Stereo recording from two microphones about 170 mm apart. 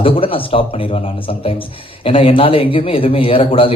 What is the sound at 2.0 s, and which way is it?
Speech, 35° left (ahead or behind).